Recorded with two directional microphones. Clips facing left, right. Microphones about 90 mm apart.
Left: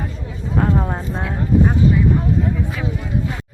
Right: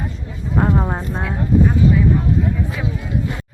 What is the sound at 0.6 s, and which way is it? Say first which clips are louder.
Speech: right 1 dB; 10° right (ahead or behind).